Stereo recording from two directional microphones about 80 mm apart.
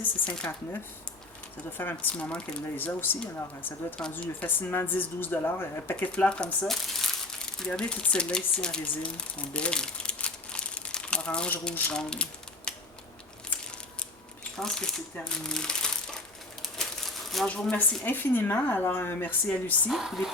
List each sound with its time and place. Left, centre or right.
0.3 s speech: left
1.8 s speech: left
2.1 s speech: centre
2.7 s speech: left
6.1 s speech: centre
11.9 s typewriter: centre
14.5 s speech: centre
17.4 s speech: centre
18.0 s speech: left
19.9 s speech: centre